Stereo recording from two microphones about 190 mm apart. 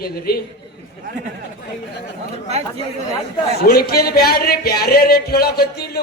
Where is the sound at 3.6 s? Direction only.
55° left (ahead or behind).